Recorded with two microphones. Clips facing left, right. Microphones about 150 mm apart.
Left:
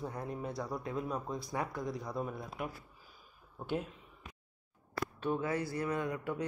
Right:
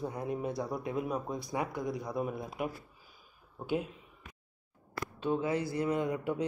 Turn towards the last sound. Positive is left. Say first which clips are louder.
# right 4 dB
turn(degrees=-20)  # may be behind; listen again after turning